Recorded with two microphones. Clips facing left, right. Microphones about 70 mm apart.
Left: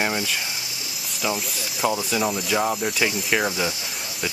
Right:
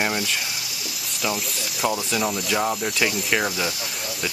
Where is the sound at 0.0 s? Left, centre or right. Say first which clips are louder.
Even; left.